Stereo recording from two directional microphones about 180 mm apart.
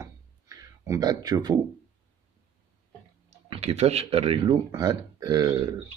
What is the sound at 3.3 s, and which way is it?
Speech, 35° right (ahead or behind).